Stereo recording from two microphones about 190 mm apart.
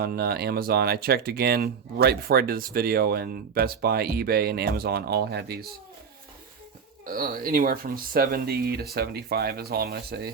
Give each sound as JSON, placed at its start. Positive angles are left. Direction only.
{"t": 0.0, "sound": "speech", "side_deg": -55}
{"t": 7.0, "sound": "speech", "side_deg": -50}